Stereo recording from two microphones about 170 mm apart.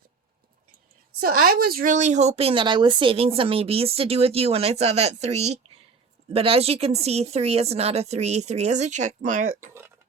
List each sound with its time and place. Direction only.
1.2 s speech: 60° right (ahead or behind)